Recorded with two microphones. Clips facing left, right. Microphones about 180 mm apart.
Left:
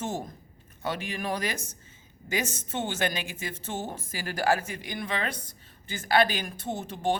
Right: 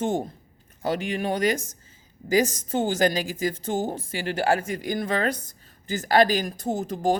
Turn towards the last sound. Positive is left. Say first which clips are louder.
# right 5 dB
turn(degrees=-35)  # may be behind; listen again after turning